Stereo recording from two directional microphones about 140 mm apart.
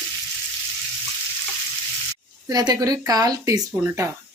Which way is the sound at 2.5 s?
25° right (ahead or behind).